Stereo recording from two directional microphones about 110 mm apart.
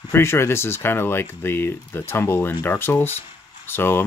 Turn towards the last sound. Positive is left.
turn(degrees=20)  # may be behind; listen again after turning